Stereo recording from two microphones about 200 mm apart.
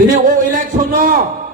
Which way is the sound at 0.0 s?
45° right (ahead or behind).